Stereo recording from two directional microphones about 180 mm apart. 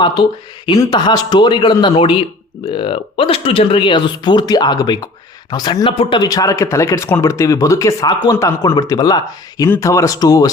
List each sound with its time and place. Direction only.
0.0 s a man's voice: 25° left (ahead or behind)